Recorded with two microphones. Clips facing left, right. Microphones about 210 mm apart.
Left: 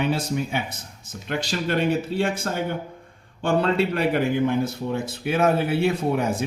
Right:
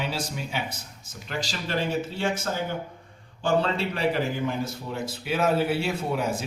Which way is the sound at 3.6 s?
60° left (ahead or behind).